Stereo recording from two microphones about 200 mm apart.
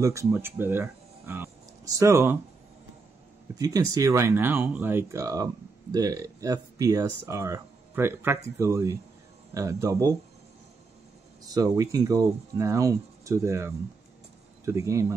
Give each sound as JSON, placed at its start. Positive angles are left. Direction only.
{"t": 0.0, "sound": "speech", "side_deg": -15}
{"t": 3.5, "sound": "speech", "side_deg": -20}
{"t": 11.4, "sound": "speech", "side_deg": -20}